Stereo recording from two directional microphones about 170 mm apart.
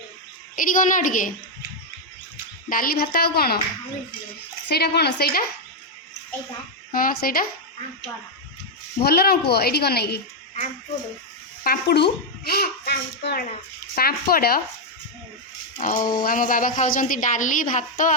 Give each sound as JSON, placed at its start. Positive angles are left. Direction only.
{"t": 0.5, "sound": "a woman's voice", "side_deg": 50}
{"t": 2.6, "sound": "a woman's voice", "side_deg": 55}
{"t": 4.7, "sound": "a woman's voice", "side_deg": 75}
{"t": 6.9, "sound": "a woman's voice", "side_deg": 55}
{"t": 9.0, "sound": "a woman's voice", "side_deg": 65}
{"t": 11.6, "sound": "a woman's voice", "side_deg": 65}
{"t": 15.8, "sound": "a woman's voice", "side_deg": 50}